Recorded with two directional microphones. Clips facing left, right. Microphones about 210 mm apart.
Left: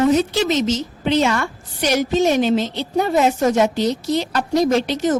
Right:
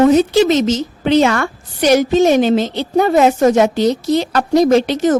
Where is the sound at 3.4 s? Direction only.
75° right (ahead or behind).